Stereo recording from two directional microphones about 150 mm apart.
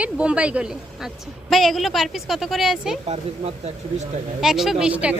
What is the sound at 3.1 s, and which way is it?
Speech, 45° right (ahead or behind).